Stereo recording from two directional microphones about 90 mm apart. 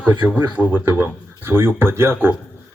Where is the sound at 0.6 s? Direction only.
20° right (ahead or behind).